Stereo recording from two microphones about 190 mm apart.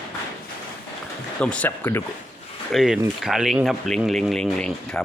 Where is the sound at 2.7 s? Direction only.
5° right (ahead or behind).